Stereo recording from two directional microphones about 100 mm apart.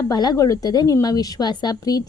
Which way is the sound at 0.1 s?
40° left (ahead or behind).